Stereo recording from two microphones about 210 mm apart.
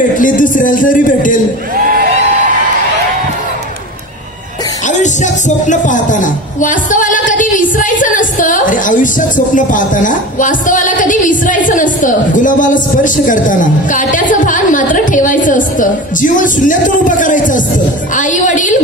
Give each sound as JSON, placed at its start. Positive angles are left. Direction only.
{"t": 0.2, "sound": "a woman's voice", "side_deg": 40}
{"t": 4.8, "sound": "a woman's voice", "side_deg": 35}